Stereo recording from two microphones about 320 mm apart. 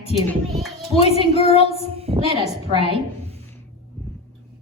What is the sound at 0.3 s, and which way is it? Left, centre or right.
Music, centre.